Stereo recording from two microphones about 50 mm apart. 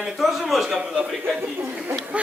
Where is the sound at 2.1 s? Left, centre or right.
Right.